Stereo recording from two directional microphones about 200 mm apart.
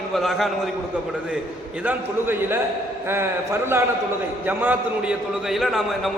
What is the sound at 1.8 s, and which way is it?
A man's voice, 10° right (ahead or behind).